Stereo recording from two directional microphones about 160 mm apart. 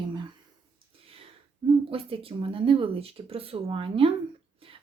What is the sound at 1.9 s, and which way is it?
Speech, 35° right (ahead or behind).